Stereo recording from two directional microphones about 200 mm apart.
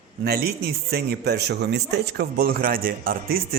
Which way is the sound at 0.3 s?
50° right (ahead or behind).